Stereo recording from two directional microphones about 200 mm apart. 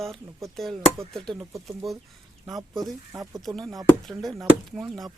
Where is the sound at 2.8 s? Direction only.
Centre (ahead or behind).